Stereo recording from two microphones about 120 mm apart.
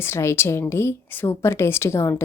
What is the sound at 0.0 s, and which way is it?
A woman's voice, 20° left (ahead or behind).